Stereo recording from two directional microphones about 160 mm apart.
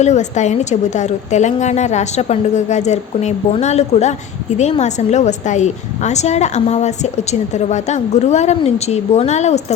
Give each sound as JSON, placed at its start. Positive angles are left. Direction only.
{"t": 0.0, "sound": "a woman's voice", "side_deg": 45}